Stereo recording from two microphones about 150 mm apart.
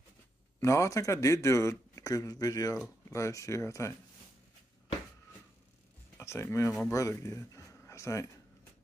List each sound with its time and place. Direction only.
0.6 s speech: 20° left (ahead or behind)
6.1 s speech: 20° left (ahead or behind)